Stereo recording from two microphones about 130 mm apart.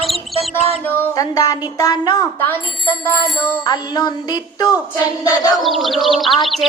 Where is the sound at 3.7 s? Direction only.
30° left (ahead or behind).